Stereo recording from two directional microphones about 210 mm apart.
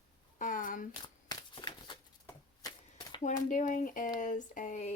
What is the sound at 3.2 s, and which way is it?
Speech, 40° left (ahead or behind).